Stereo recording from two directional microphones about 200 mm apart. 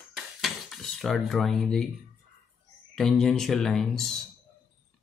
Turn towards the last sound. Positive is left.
turn(degrees=0)  # may be behind; listen again after turning